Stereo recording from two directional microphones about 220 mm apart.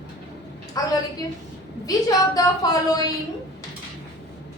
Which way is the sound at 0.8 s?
15° left (ahead or behind).